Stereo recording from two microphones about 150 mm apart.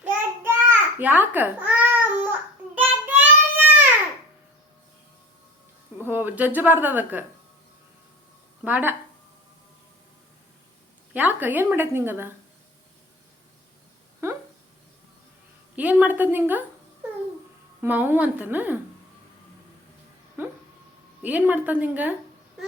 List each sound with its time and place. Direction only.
0.0 s babbling: 15° right (ahead or behind)
2.7 s child singing: 10° right (ahead or behind)
6.0 s speech: 15° right (ahead or behind)
8.6 s a woman's voice: 10° right (ahead or behind)
11.1 s a woman's voice: 10° right (ahead or behind)
14.2 s a sound: 15° right (ahead or behind)
15.7 s a woman's voice: 10° right (ahead or behind)
17.7 s a woman's voice: 10° right (ahead or behind)
20.4 s music: 15° right (ahead or behind)
21.2 s a woman's voice: 10° right (ahead or behind)